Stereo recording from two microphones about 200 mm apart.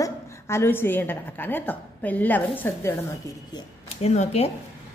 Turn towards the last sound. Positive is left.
turn(degrees=30)  # may be behind; listen again after turning